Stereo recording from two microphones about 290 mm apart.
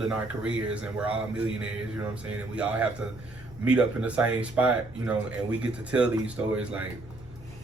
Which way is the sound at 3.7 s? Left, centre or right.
Centre.